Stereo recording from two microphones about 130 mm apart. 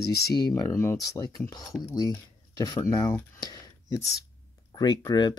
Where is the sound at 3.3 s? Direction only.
30° left (ahead or behind).